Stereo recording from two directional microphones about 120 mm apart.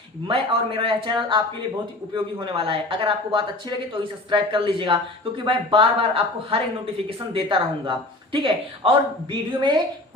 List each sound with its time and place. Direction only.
0.3 s a woman's voice: 50° right (ahead or behind)